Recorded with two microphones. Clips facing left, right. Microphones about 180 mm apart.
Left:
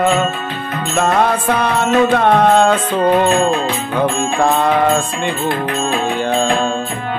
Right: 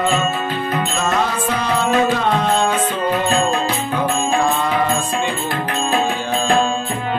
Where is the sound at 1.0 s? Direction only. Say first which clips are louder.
Left 8 dB; 60° left (ahead or behind).